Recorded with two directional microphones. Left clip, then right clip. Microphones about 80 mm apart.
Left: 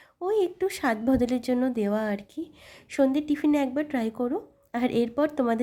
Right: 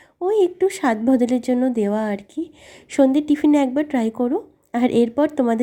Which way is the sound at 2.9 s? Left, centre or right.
Right.